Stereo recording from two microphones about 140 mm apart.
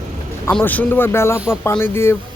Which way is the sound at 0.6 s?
15° left (ahead or behind).